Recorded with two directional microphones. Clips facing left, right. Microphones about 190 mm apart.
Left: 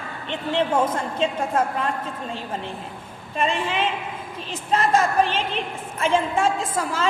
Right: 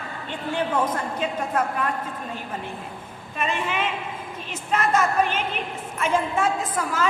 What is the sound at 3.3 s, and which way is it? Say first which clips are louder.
A woman's voice: left 3 dB; 30° left (ahead or behind).